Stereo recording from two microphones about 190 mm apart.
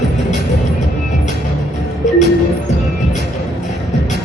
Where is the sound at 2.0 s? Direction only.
40° left (ahead or behind).